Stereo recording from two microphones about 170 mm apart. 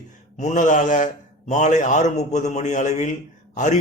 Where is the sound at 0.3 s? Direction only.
45° left (ahead or behind).